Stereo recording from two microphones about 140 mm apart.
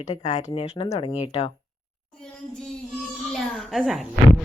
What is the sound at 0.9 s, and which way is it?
Speech, 40° left (ahead or behind).